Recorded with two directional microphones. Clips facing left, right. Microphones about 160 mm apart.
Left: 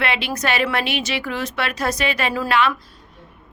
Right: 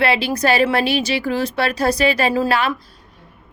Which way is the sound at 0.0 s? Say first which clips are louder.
Right 5 dB; 35° right (ahead or behind).